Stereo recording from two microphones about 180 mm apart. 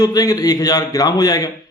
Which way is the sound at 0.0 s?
20° left (ahead or behind).